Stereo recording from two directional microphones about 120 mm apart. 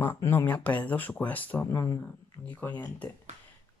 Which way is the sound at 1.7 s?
30° left (ahead or behind).